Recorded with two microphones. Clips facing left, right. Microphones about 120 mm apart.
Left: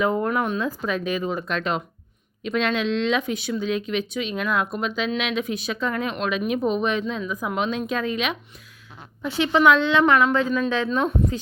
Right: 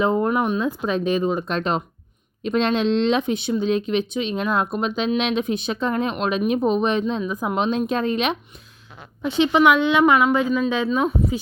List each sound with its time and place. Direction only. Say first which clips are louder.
0.0 s a woman's voice: right 3 dB; 25° right (ahead or behind)
9.2 s speech: right 2 dB; 20° right (ahead or behind); by 11.3 s 5° right (ahead or behind)